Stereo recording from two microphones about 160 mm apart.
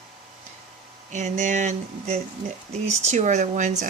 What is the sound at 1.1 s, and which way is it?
Speech, 50° right (ahead or behind).